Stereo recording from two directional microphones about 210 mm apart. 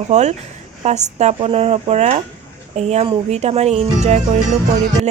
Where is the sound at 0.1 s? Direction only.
35° right (ahead or behind).